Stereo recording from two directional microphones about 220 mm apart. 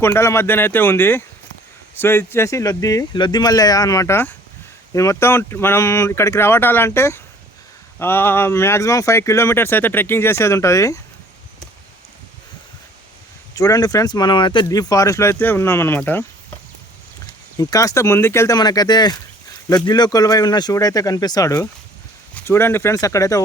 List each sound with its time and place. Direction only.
0.0 s speech: 10° left (ahead or behind)
13.5 s speech: 15° left (ahead or behind)
17.6 s speech: 15° left (ahead or behind)